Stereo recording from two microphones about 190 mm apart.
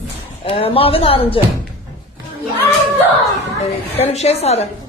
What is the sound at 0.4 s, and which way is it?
Speech, 30° left (ahead or behind).